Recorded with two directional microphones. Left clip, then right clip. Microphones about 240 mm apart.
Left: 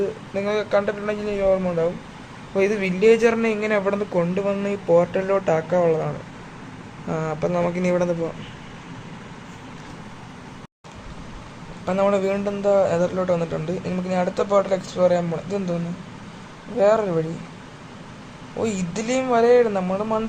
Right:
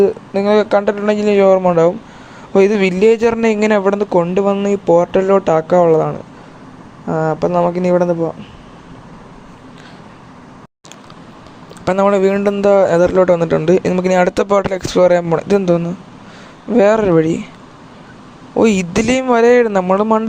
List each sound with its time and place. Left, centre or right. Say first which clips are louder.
0.3 s a man's voice: right 8 dB; right
7.2 s speech: right 9 dB; right
11.9 s a man's voice: right 8 dB; right
18.6 s a man's voice: right 12 dB; right